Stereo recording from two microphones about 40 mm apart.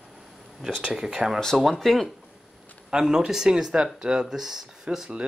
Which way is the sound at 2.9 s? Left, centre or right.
Centre.